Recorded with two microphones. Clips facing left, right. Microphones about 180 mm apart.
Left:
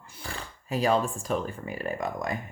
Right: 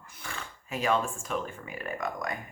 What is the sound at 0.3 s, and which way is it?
A woman's voice, 35° left (ahead or behind).